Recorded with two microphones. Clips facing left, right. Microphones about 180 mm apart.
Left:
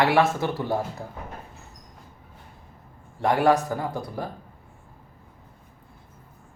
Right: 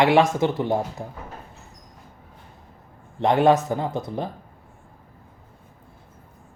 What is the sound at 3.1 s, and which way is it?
Speech, 20° right (ahead or behind).